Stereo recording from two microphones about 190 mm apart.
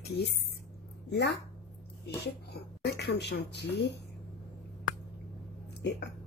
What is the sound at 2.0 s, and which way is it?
A woman's voice, 60° left (ahead or behind).